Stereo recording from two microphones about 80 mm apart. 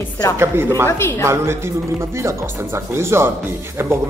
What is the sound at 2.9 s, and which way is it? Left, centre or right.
Speech, right.